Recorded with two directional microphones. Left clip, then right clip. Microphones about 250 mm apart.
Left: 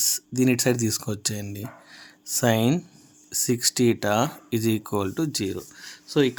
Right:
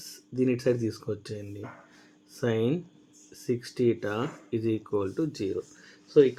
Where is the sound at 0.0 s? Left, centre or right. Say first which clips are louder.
Left 6 dB; left.